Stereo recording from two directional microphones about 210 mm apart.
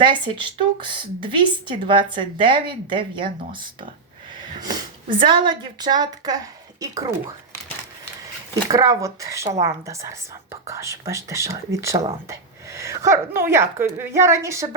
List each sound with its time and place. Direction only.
0.0 s speech: 25° right (ahead or behind)
4.4 s a sound: 20° right (ahead or behind)
5.5 s a woman's voice: 20° right (ahead or behind)
8.6 s a woman's voice: 15° right (ahead or behind)